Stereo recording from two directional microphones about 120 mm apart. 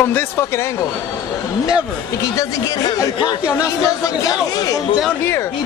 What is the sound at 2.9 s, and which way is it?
A man's voice, 30° left (ahead or behind).